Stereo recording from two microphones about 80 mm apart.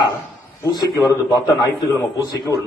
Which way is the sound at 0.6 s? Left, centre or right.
Left.